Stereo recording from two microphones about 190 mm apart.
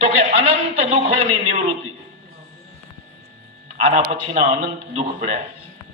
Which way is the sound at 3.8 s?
30° right (ahead or behind).